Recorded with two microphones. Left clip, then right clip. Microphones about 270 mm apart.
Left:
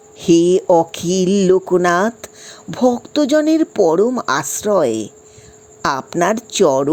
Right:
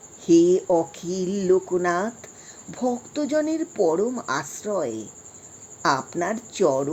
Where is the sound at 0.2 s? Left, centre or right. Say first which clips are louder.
Left 5 dB; left.